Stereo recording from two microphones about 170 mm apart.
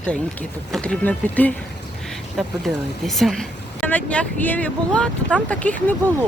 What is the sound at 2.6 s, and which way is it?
Speech, centre (ahead or behind).